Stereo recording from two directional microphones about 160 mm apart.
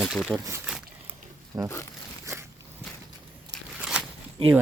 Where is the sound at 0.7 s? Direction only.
5° right (ahead or behind).